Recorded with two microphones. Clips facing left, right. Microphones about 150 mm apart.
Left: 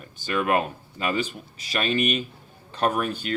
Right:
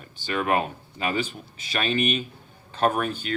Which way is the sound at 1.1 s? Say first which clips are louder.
Even; 35° left (ahead or behind).